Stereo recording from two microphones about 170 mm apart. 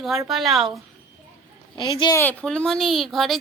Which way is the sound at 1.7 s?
25° left (ahead or behind).